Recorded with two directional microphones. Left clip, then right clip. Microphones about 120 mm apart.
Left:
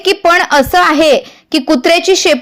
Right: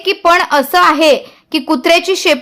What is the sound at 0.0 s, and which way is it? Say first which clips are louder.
Speech: left 1 dB; 30° left (ahead or behind).